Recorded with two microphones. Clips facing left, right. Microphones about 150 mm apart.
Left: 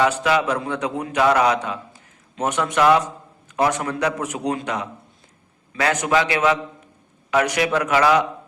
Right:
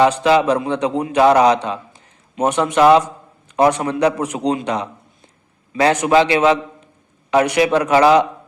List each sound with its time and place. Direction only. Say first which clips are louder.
0.0 s a man's voice: right 5 dB; 25° right (ahead or behind)
2.7 s a man's voice: right 5 dB; 25° right (ahead or behind)